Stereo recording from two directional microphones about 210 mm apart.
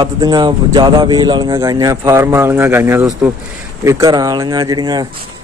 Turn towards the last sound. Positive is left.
turn(degrees=-20)  # may be behind; listen again after turning